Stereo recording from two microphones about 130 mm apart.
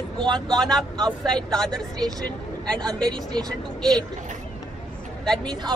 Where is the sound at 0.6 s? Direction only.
5° left (ahead or behind).